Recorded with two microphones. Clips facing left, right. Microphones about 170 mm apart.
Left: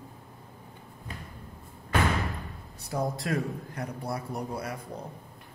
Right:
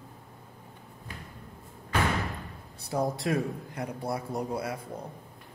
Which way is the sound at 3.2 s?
20° right (ahead or behind).